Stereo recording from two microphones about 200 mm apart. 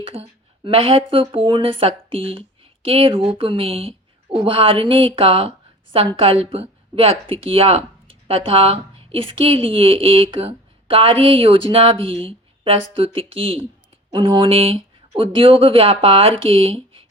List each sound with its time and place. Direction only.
0.0 s speech: 25° right (ahead or behind)